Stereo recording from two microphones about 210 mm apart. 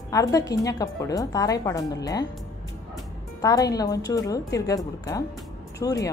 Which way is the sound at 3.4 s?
15° left (ahead or behind).